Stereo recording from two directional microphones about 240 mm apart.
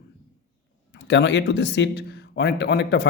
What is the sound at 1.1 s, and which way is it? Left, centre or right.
Speech, left.